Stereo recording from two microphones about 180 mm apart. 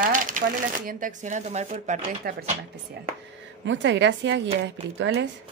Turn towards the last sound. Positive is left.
turn(degrees=-85)